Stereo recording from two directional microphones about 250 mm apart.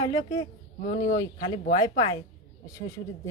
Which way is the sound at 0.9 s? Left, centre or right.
Left.